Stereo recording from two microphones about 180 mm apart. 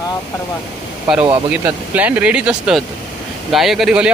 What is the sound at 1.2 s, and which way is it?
Speech, 10° right (ahead or behind).